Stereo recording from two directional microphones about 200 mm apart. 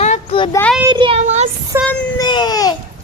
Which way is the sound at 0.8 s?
25° right (ahead or behind).